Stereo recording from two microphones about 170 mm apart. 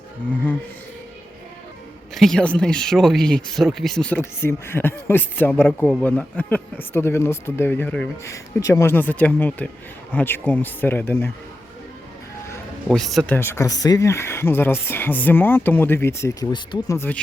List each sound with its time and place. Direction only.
2.1 s speech: centre (ahead or behind)
12.9 s speech: centre (ahead or behind)
13.3 s speech: 15° left (ahead or behind)